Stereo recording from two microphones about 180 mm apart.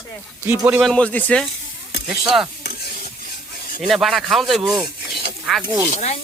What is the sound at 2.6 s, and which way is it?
Stir, 60° left (ahead or behind).